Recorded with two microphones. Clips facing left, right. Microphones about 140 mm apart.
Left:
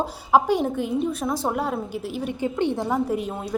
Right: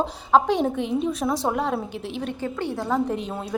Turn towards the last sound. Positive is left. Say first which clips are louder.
# left 2 dB
turn(degrees=5)  # may be behind; listen again after turning